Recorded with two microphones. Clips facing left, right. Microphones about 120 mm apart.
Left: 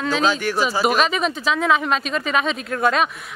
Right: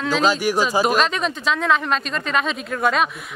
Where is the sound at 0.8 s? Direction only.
5° left (ahead or behind).